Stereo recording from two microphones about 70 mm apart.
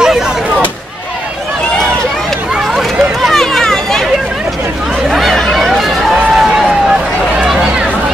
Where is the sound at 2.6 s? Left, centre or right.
Centre.